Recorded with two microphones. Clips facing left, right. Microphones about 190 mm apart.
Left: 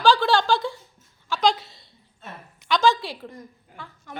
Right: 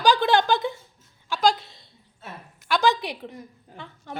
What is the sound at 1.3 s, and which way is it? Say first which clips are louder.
A woman's voice: even; 5° right (ahead or behind).